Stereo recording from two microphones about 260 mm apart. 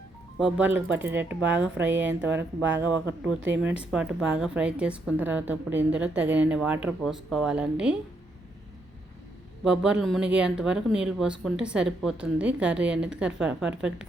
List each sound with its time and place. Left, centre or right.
0.3 s speech: centre
9.6 s speech: centre